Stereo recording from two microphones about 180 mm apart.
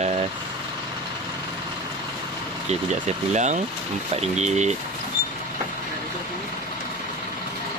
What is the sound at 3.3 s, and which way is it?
Speech, 40° right (ahead or behind).